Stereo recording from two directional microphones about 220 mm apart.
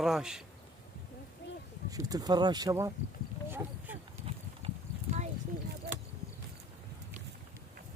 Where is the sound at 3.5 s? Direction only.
10° right (ahead or behind).